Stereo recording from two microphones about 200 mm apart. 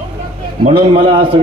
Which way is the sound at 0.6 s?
30° right (ahead or behind).